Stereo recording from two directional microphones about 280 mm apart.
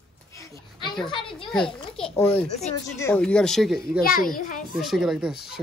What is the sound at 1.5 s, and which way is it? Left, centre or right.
A child's voice, centre.